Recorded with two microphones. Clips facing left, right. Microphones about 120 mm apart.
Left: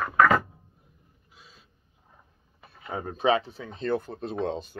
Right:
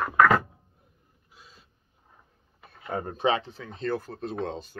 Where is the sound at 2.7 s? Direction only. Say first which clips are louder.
Right 2 dB; 5° left (ahead or behind).